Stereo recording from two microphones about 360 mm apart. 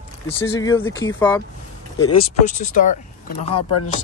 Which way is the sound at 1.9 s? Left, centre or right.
Centre.